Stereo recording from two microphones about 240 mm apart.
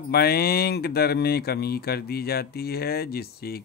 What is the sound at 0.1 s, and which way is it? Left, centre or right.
Speech, left.